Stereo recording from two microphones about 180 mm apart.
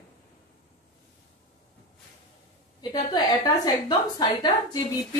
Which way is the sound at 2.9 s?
20° left (ahead or behind).